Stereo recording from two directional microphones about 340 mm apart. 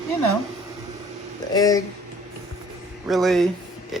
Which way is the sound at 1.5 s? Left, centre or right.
Centre.